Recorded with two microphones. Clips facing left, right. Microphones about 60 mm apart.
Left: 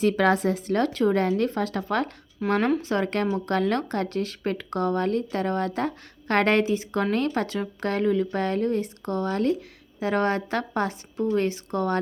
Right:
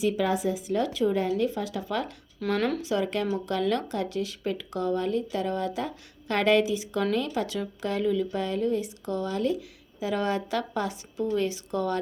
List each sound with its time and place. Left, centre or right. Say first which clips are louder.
0.0 s a woman's voice: left 4 dB; left
2.4 s speech: left 3 dB; centre
2.8 s speech: left 2 dB; left